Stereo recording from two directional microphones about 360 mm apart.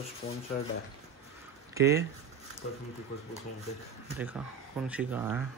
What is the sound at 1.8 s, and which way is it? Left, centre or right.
Speech, centre.